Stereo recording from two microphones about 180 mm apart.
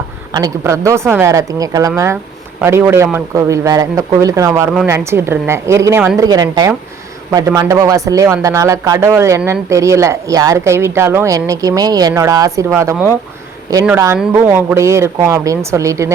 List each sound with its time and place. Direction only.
0.3 s a man's voice: 20° right (ahead or behind)